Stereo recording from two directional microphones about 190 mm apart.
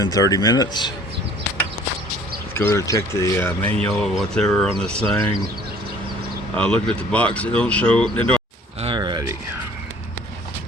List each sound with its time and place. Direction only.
0.0 s speech: 20° left (ahead or behind)
2.6 s speech: 15° left (ahead or behind)
6.6 s speech: 5° left (ahead or behind)
8.8 s a sound: 25° right (ahead or behind)